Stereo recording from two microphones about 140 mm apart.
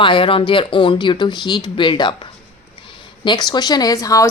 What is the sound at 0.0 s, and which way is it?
Speech, 35° left (ahead or behind).